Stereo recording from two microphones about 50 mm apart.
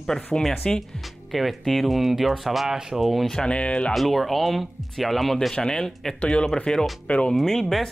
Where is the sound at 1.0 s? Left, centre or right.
Centre.